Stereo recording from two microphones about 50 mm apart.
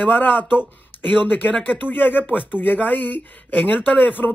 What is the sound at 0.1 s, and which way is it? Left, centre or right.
Speech, left.